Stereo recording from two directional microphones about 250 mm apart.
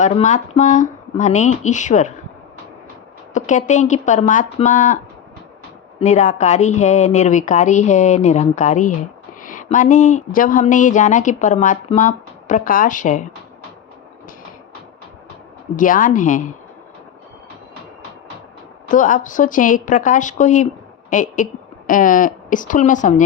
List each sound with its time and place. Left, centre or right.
0.0 s a woman's voice: left
3.3 s a woman's voice: left
6.0 s a woman's voice: left
15.7 s speech: left
18.9 s speech: left